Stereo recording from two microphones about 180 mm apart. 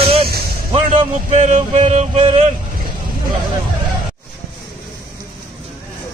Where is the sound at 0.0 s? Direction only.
30° right (ahead or behind).